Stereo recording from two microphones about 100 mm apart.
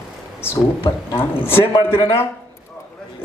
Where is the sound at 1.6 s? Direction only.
60° left (ahead or behind).